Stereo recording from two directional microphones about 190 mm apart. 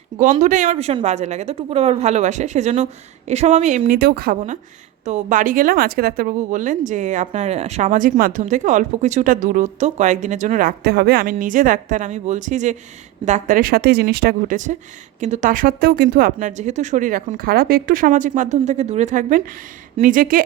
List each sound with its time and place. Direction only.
0.2 s speech: 40° right (ahead or behind)